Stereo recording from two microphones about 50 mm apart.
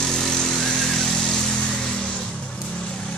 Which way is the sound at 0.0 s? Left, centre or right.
Centre.